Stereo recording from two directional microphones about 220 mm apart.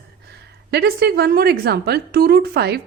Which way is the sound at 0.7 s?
45° right (ahead or behind).